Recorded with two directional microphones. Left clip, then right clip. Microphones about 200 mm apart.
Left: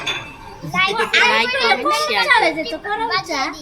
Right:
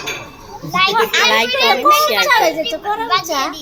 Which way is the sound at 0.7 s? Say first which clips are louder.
Right 3 dB; centre (ahead or behind).